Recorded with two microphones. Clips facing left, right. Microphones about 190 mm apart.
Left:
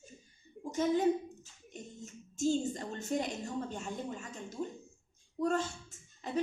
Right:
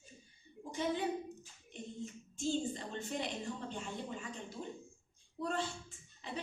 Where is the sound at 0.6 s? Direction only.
45° left (ahead or behind).